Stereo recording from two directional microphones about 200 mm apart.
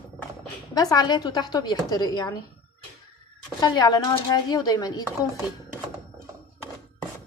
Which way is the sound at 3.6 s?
20° left (ahead or behind).